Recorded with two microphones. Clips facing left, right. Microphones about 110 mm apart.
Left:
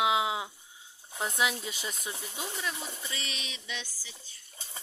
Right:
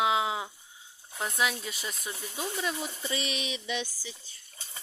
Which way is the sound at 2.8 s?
15° right (ahead or behind).